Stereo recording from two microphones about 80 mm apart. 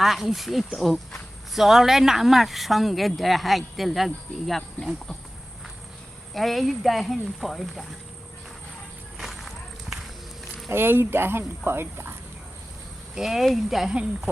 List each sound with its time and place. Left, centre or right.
0.0 s speech: centre
6.3 s speech: centre
9.1 s a sound: centre
10.7 s speech: right
13.1 s speech: centre